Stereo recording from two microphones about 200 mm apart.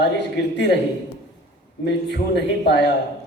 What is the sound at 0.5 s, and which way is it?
Speech, 60° left (ahead or behind).